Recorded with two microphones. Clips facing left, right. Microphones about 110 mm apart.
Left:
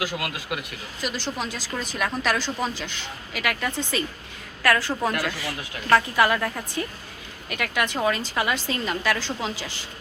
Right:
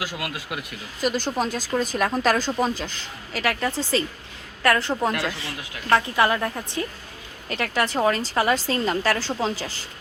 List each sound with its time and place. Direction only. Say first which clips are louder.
1.0 s a woman's voice: right 6 dB; 45° right (ahead or behind); by 6.5 s 25° right (ahead or behind)
7.5 s a woman's voice: right 2 dB; 30° right (ahead or behind)